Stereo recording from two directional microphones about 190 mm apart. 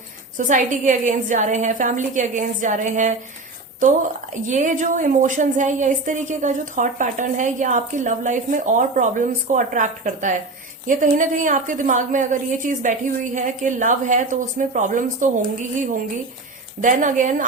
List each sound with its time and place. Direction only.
0.3 s a woman's voice: 40° right (ahead or behind)
4.4 s a woman's voice: 40° right (ahead or behind)
16.8 s a woman's voice: 45° right (ahead or behind)